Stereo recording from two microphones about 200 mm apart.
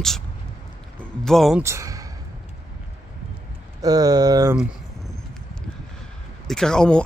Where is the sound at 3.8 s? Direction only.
20° right (ahead or behind).